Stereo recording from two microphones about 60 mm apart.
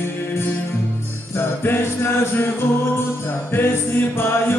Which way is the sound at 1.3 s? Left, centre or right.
Left.